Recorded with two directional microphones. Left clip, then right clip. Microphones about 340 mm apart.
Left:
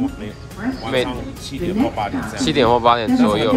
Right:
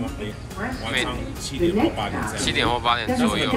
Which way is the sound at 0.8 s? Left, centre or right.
Centre.